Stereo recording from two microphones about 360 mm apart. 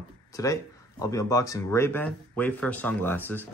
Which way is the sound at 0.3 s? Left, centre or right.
Centre.